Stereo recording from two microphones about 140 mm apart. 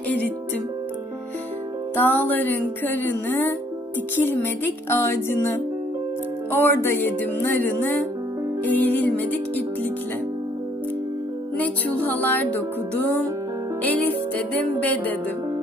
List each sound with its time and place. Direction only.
2.0 s speech: 15° left (ahead or behind)
11.5 s music: 10° left (ahead or behind)